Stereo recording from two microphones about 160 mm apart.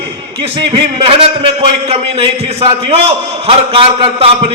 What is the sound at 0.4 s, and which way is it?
A man's voice, 35° right (ahead or behind).